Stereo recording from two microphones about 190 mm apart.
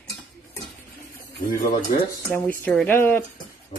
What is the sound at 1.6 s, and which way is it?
Speech, 40° left (ahead or behind).